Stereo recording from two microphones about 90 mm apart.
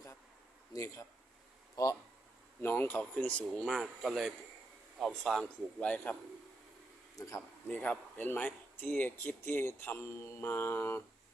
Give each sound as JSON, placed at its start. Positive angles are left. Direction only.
{"t": 0.7, "sound": "speech", "side_deg": 40}
{"t": 2.6, "sound": "speech", "side_deg": 25}
{"t": 3.0, "sound": "a man's voice", "side_deg": 15}
{"t": 3.7, "sound": "a man's voice", "side_deg": 0}
{"t": 7.2, "sound": "speech", "side_deg": 35}
{"t": 7.7, "sound": "speech", "side_deg": 20}